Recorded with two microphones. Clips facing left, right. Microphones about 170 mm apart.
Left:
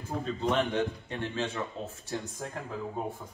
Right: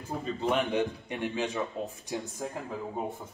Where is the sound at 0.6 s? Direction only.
15° right (ahead or behind).